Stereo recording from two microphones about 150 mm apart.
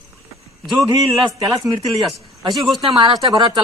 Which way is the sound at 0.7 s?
25° right (ahead or behind).